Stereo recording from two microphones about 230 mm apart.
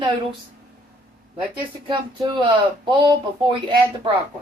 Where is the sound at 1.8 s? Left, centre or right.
Right.